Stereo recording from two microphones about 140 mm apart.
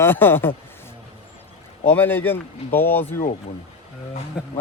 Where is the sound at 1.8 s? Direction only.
15° left (ahead or behind).